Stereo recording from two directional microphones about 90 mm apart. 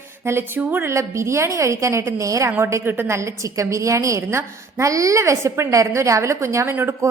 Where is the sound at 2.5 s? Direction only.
25° right (ahead or behind).